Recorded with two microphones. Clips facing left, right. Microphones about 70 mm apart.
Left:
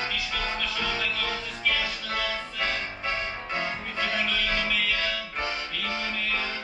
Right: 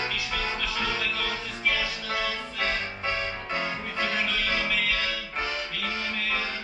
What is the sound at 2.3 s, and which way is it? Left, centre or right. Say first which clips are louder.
Music: even; centre.